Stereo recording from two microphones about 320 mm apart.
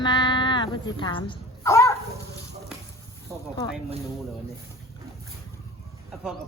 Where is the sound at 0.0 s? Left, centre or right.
Centre.